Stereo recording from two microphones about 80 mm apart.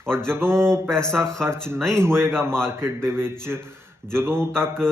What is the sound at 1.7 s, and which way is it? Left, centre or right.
Speech, centre.